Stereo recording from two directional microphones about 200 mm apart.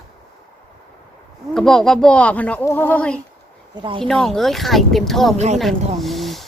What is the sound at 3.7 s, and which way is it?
Speech, 25° right (ahead or behind).